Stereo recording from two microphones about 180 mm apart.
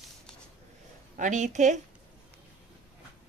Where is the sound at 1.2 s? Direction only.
45° right (ahead or behind).